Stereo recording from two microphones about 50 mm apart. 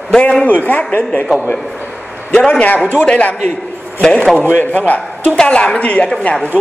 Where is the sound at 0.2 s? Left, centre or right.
Left.